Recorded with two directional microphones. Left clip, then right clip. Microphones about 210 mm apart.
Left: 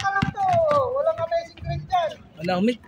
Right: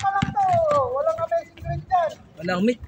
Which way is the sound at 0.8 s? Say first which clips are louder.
Even; 50° left (ahead or behind).